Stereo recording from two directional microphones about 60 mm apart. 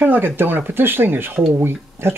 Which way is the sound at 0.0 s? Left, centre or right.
Right.